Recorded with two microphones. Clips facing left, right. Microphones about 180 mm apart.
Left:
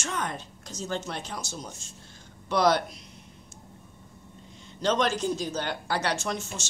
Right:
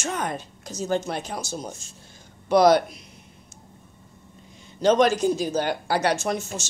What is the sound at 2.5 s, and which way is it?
Speech, 10° right (ahead or behind).